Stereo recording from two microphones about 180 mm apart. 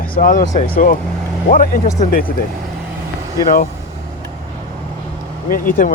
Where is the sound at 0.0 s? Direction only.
50° left (ahead or behind).